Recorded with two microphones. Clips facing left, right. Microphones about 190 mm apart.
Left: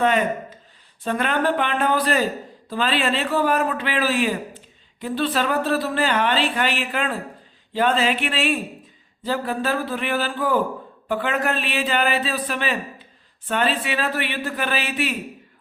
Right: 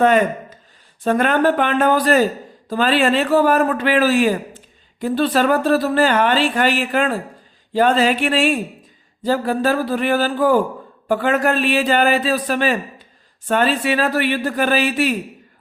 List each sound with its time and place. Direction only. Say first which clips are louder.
1.0 s a man's voice: right 6 dB; 45° right (ahead or behind)